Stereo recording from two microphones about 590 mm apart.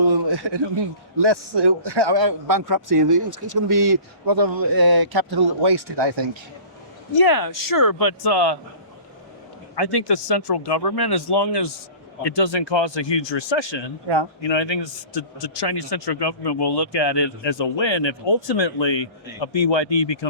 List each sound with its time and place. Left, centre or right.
0.0 s a sound: right
1.1 s speech: right
7.2 s speech: left
9.7 s a man's voice: left